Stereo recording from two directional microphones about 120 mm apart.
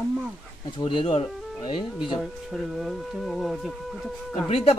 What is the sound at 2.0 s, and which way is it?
Speech, centre (ahead or behind).